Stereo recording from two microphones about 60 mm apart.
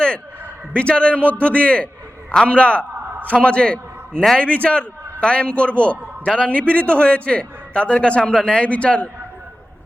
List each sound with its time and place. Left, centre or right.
0.7 s a man's voice: centre